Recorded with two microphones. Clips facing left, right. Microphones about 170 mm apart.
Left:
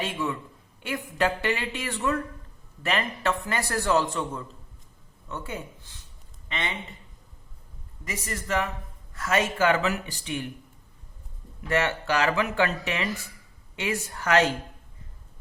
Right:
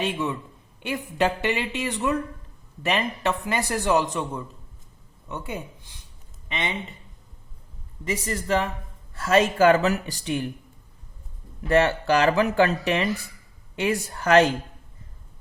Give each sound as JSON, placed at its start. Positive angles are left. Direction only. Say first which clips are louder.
{"t": 0.0, "sound": "a man's voice", "louder": "right 3 dB", "side_deg": -20}
{"t": 8.0, "sound": "speech", "louder": "right 6 dB", "side_deg": -30}
{"t": 11.7, "sound": "speech", "louder": "right 6 dB", "side_deg": -35}